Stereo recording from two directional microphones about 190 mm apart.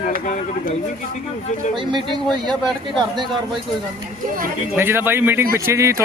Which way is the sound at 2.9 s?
25° right (ahead or behind).